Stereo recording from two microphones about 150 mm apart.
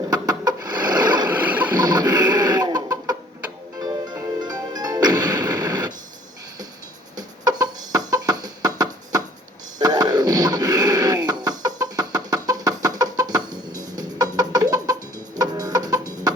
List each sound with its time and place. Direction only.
0.1 s chicken: 25° right (ahead or behind)
1.4 s bow-wow: 10° right (ahead or behind)
1.7 s chicken: 25° right (ahead or behind)
4.4 s music: 25° right (ahead or behind)
7.2 s music: 25° right (ahead or behind)
9.7 s a sound: 25° right (ahead or behind)